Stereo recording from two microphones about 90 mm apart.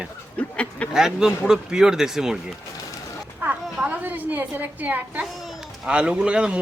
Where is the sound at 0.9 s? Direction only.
5° right (ahead or behind).